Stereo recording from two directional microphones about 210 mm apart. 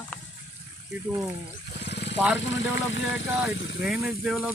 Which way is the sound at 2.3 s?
60° left (ahead or behind).